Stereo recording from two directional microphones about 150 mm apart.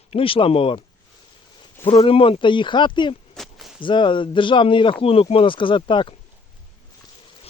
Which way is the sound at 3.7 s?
35° left (ahead or behind).